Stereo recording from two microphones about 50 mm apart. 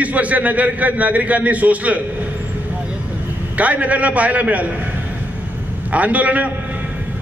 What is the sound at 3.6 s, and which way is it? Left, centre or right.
A man's voice, right.